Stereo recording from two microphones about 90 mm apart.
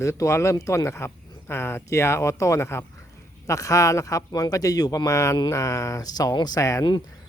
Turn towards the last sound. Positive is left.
turn(degrees=40)  # may be behind; listen again after turning